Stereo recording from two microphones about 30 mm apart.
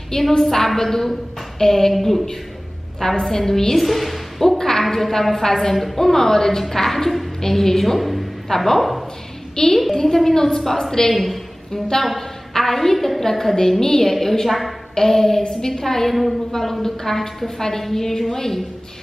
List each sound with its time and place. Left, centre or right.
0.3 s a woman's voice: centre
2.0 s a woman's voice: centre
3.0 s a woman's voice: centre
3.8 s a woman's voice: centre
4.5 s a woman's voice: centre
9.8 s a woman's voice: centre
11.1 s a woman's voice: centre
11.7 s a woman's voice: centre